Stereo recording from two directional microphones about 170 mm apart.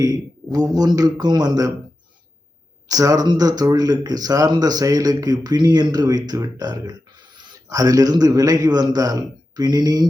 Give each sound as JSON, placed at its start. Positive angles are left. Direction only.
{"t": 0.0, "sound": "speech", "side_deg": -20}
{"t": 2.9, "sound": "speech", "side_deg": -20}